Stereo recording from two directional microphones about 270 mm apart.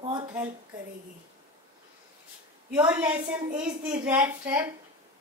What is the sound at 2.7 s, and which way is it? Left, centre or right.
A woman's voice, centre.